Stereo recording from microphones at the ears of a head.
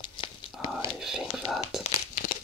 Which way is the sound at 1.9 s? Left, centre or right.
Left.